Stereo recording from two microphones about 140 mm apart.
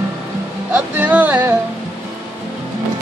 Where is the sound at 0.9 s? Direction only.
10° right (ahead or behind).